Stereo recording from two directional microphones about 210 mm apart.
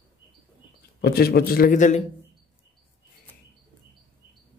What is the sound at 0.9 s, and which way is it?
A man's voice, 50° left (ahead or behind).